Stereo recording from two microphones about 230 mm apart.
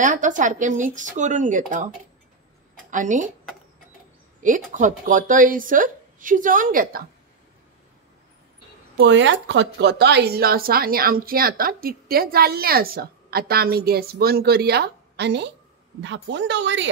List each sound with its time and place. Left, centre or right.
0.0 s a woman's voice: right
2.9 s speech: right
4.4 s a woman's voice: right
8.9 s a woman's voice: right